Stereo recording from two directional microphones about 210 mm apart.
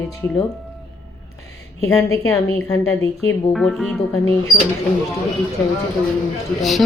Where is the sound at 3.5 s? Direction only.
Centre (ahead or behind).